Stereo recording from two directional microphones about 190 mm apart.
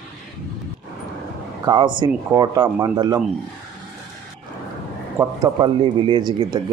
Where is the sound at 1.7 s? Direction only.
25° right (ahead or behind).